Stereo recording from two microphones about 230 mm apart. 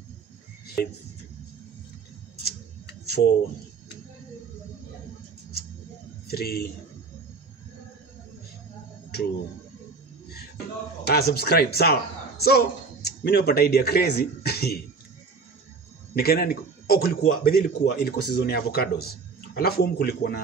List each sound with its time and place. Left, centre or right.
6.3 s speech: left
11.1 s speech: left
16.2 s speech: left